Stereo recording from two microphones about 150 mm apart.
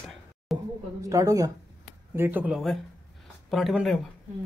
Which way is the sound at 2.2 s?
10° right (ahead or behind).